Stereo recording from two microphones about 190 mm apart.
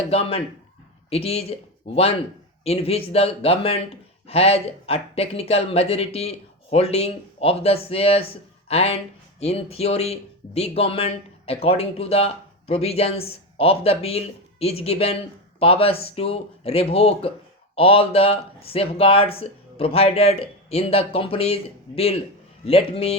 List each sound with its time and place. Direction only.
0.1 s speech: 30° left (ahead or behind)